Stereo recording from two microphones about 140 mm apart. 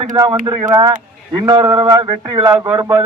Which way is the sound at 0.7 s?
25° right (ahead or behind).